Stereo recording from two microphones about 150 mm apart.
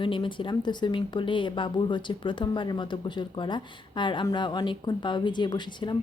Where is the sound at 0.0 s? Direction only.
35° left (ahead or behind).